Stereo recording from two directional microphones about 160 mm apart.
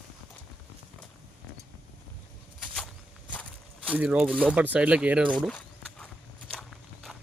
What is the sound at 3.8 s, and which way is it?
Speech, 5° right (ahead or behind).